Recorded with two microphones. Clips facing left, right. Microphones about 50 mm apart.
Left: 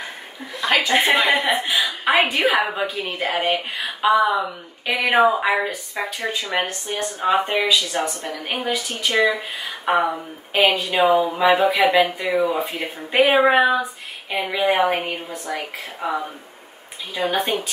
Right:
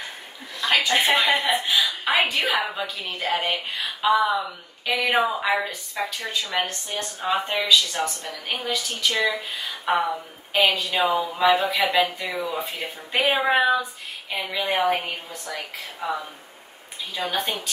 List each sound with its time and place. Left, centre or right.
0.7 s a woman's voice: centre
1.2 s a woman's voice: left
1.5 s a woman's voice: left